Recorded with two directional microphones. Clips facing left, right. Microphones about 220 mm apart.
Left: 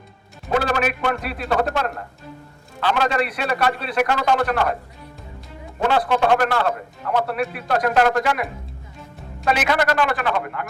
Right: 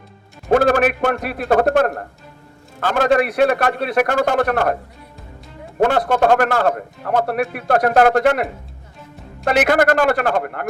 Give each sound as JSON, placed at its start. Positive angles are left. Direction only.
{"t": 0.5, "sound": "a man's voice", "side_deg": -50}
{"t": 5.9, "sound": "a man's voice", "side_deg": -50}